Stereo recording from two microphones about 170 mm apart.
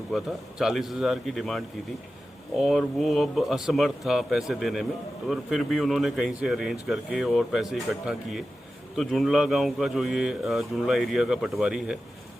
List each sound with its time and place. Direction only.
0.1 s a man's voice: centre (ahead or behind)